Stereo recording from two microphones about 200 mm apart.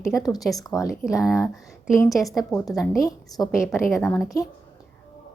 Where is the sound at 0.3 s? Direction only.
Centre (ahead or behind).